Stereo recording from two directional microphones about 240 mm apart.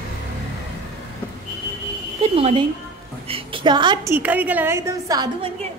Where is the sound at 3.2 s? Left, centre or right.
Right.